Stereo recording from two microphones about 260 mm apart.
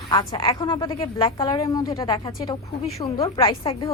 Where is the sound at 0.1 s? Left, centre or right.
Centre.